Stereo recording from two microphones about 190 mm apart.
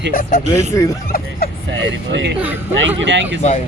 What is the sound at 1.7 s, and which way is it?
A man's voice, 75° right (ahead or behind).